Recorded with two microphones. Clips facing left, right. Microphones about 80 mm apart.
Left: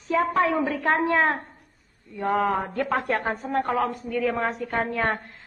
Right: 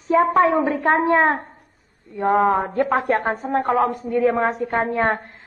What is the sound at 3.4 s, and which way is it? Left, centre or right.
Speech, right.